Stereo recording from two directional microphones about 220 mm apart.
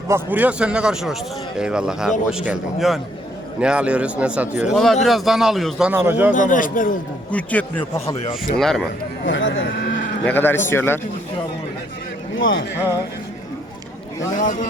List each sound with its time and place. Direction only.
0.1 s a man's voice: 5° right (ahead or behind)
6.3 s a man's voice: 35° left (ahead or behind)
7.3 s a man's voice: 5° left (ahead or behind)
9.2 s speech: 60° left (ahead or behind)
10.2 s a man's voice: 10° left (ahead or behind)
12.4 s speech: 60° left (ahead or behind)
14.3 s a man's voice: 40° left (ahead or behind)